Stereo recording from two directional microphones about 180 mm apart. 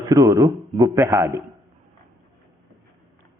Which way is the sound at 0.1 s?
20° right (ahead or behind).